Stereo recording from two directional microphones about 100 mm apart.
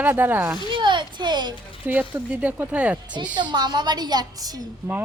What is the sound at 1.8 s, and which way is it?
Speech, 20° right (ahead or behind).